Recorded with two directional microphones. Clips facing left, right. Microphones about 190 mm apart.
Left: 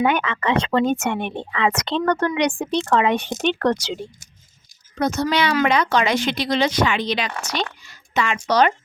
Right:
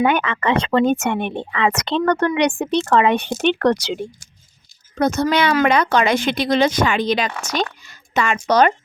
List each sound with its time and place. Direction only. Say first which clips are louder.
0.0 s speech: right 2 dB; 55° right (ahead or behind)